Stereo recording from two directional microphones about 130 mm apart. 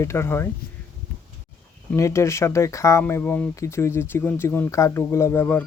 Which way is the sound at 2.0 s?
20° left (ahead or behind).